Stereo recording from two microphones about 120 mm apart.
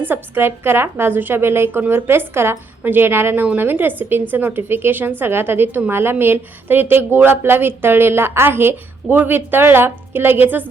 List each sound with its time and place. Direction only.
0.0 s a woman's voice: 20° right (ahead or behind)